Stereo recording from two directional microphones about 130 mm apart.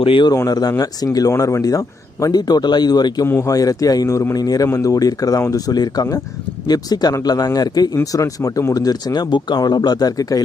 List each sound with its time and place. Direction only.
0.0 s a man's voice: 40° left (ahead or behind)
0.3 s a man's voice: 30° left (ahead or behind)